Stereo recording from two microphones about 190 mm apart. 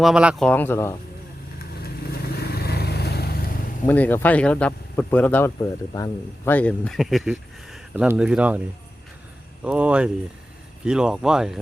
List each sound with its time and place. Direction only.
0.0 s speech: 5° right (ahead or behind)
0.4 s speech: 10° left (ahead or behind)
1.5 s vehicle: 55° left (ahead or behind)
3.8 s speech: 10° left (ahead or behind); by 8.6 s 5° right (ahead or behind)
9.6 s speech: 5° right (ahead or behind)